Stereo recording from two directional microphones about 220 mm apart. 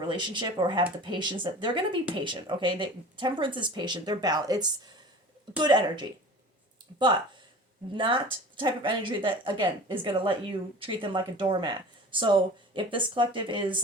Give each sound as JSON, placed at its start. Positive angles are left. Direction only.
{"t": 0.1, "sound": "speech", "side_deg": -20}
{"t": 7.9, "sound": "speech", "side_deg": -20}